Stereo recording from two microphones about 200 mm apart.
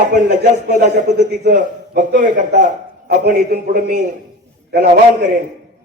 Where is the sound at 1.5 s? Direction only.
40° right (ahead or behind).